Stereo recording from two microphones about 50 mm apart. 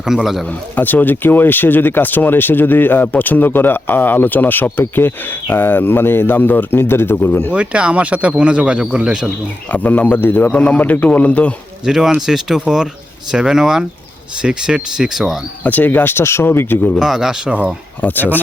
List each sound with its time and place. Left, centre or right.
0.0 s speech: centre
0.8 s speech: left
7.5 s speech: right
9.7 s speech: left
10.5 s speech: left
11.9 s speech: centre
15.6 s speech: left
17.0 s speech: centre
18.0 s speech: left